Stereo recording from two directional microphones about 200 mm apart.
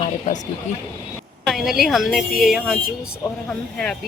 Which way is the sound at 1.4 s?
Centre (ahead or behind).